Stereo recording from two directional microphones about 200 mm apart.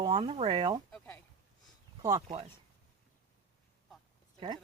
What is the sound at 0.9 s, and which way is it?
Speech, 10° left (ahead or behind).